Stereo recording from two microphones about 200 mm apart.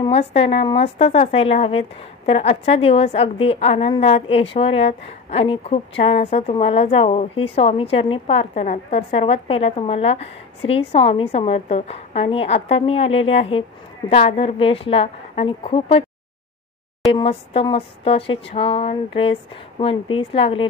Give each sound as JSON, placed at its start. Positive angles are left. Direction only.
{"t": 0.0, "sound": "a woman's voice", "side_deg": 30}
{"t": 17.1, "sound": "a woman's voice", "side_deg": 25}